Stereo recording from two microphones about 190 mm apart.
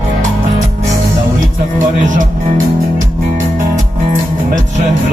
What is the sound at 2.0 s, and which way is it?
Music, 40° right (ahead or behind).